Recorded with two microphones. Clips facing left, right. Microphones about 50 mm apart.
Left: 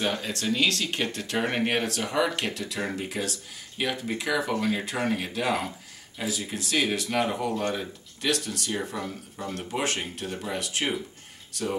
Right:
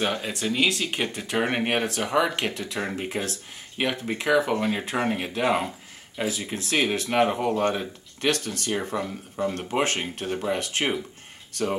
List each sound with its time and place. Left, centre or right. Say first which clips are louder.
0.0 s speech: right 2 dB; centre; by 11.0 s right